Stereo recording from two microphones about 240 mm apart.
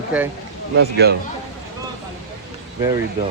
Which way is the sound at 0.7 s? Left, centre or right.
Right.